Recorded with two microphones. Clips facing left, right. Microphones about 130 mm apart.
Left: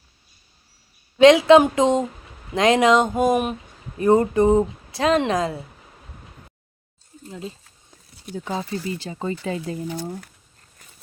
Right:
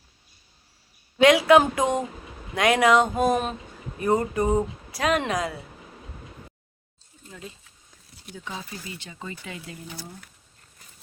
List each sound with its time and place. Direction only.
1.2 s speech: 25° left (ahead or behind)
4.0 s speech: 30° left (ahead or behind)
7.3 s speech: 25° left (ahead or behind)
7.9 s speech: 35° left (ahead or behind)
9.9 s speech: 45° left (ahead or behind)